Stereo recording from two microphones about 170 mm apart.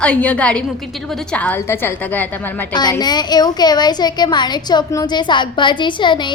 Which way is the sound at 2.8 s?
25° left (ahead or behind).